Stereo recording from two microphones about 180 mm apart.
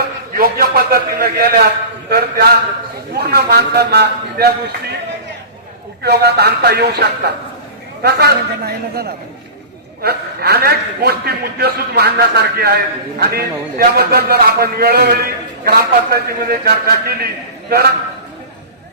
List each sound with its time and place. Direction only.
0.3 s a man's voice: 55° right (ahead or behind)
6.0 s a man's voice: 65° right (ahead or behind)